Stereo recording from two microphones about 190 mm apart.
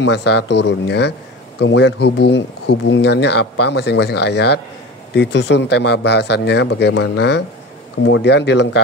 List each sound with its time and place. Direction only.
0.0 s speech: 65° left (ahead or behind)